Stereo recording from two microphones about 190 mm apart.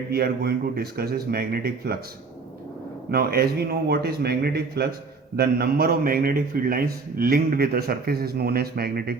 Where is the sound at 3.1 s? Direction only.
55° right (ahead or behind).